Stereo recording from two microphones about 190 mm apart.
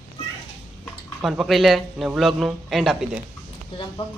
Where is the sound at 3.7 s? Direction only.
30° left (ahead or behind).